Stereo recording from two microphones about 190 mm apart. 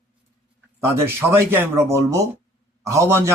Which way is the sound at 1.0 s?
15° right (ahead or behind).